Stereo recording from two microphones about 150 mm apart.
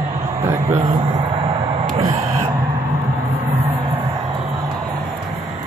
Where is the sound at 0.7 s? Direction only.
45° right (ahead or behind).